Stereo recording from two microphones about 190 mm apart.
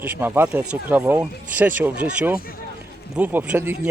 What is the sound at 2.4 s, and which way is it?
Speech, 50° left (ahead or behind).